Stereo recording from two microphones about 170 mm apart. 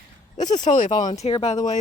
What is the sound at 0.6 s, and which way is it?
Speech, 50° left (ahead or behind).